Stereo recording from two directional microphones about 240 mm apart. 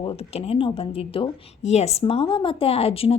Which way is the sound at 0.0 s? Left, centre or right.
Left.